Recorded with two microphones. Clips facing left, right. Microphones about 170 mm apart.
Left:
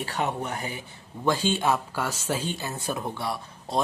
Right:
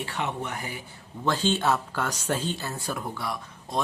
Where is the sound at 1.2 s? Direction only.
10° left (ahead or behind).